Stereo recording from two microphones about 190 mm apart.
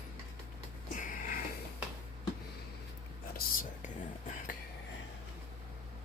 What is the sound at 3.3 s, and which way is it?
Whispering, 45° left (ahead or behind).